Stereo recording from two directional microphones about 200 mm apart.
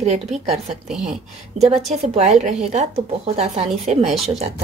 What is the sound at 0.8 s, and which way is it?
Speech, 5° right (ahead or behind).